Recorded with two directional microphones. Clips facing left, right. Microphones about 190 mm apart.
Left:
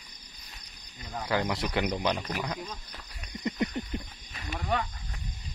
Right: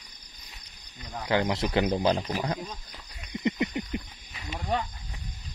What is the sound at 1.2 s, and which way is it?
Speech, 20° right (ahead or behind).